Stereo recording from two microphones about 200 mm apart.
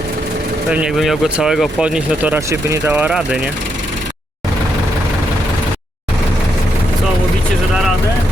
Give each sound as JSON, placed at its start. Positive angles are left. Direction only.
{"t": 0.7, "sound": "speech", "side_deg": -5}